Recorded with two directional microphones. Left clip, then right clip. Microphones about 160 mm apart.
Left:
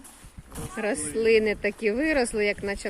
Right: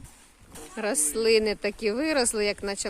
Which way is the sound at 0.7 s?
25° right (ahead or behind).